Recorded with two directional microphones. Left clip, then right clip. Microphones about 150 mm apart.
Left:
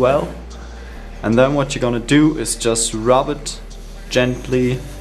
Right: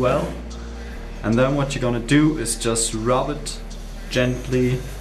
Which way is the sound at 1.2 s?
25° left (ahead or behind).